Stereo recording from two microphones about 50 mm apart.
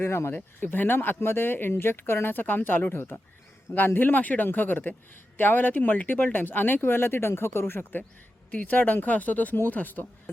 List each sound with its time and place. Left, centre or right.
0.0 s speech: left
0.3 s speech: left
2.9 s speech: left
8.5 s speech: left